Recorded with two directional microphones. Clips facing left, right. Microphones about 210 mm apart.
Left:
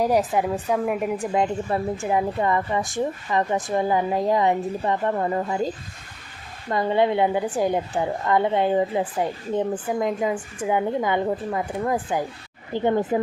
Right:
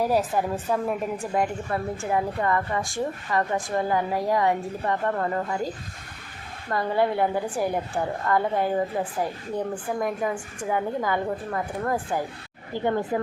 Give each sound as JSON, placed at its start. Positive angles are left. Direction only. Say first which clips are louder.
{"t": 0.0, "sound": "a woman's voice", "louder": "left 3 dB", "side_deg": 15}
{"t": 6.7, "sound": "a woman's voice", "louder": "left 3 dB", "side_deg": 20}